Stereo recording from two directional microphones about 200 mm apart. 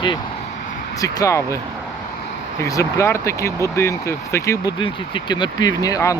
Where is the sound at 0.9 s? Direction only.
15° left (ahead or behind).